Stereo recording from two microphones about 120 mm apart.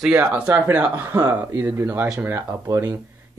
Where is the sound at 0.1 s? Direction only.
10° right (ahead or behind).